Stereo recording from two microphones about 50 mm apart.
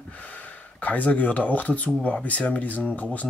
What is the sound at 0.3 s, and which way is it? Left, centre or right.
Speech, left.